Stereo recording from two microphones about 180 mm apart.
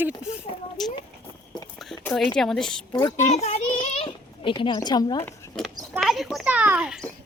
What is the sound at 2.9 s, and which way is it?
Speech, 20° left (ahead or behind).